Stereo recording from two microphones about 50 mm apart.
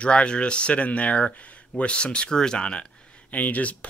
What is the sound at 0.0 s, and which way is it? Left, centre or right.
Speech, left.